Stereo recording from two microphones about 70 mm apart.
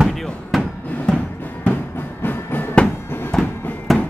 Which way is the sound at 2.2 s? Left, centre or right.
Left.